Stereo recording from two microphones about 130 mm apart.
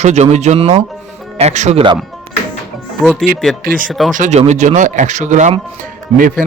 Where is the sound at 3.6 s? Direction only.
90° right.